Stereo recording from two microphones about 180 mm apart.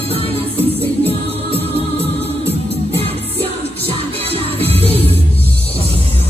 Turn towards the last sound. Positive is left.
turn(degrees=-35)  # may be behind; listen again after turning